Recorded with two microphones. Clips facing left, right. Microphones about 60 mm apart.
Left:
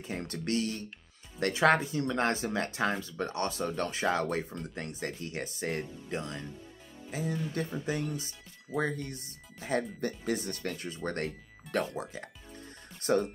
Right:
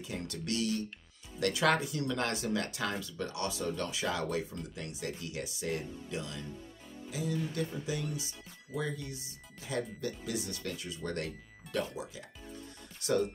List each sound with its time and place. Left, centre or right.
0.0 s speech: left